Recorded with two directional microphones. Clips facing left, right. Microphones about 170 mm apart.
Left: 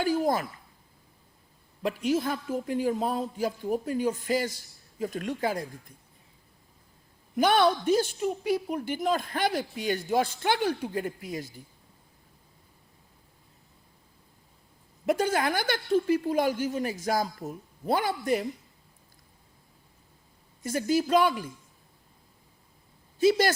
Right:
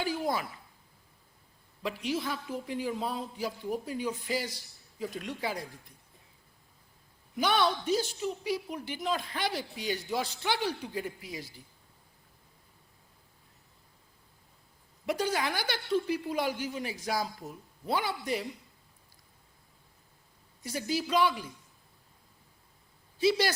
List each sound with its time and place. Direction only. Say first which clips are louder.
0.0 s a woman's voice: left 6 dB; 45° left (ahead or behind)
1.8 s a woman's voice: left 6 dB; 45° left (ahead or behind)
7.3 s a woman's voice: left 5 dB; 50° left (ahead or behind)
15.0 s a woman's voice: left 5 dB; 50° left (ahead or behind)
20.6 s a woman's voice: left 7 dB; 50° left (ahead or behind)
23.1 s speech: left 4 dB; 45° left (ahead or behind)